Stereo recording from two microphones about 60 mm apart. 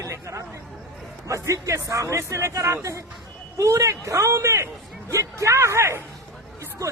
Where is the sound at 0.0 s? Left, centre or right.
Right.